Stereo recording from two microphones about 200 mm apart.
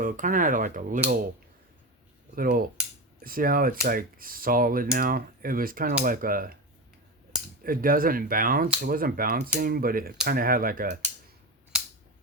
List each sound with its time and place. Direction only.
0.0 s speech: 40° right (ahead or behind)
2.3 s speech: 45° right (ahead or behind)
7.6 s speech: 45° right (ahead or behind)